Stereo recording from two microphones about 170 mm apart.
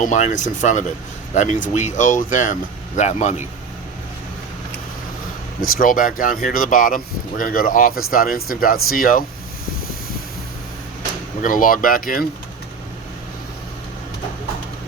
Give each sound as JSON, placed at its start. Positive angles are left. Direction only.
{"t": 0.0, "sound": "speech", "side_deg": 45}
{"t": 5.6, "sound": "speech", "side_deg": 55}
{"t": 11.4, "sound": "speech", "side_deg": 50}